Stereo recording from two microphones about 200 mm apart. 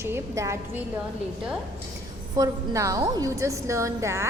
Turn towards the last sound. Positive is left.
turn(degrees=-15)  # may be behind; listen again after turning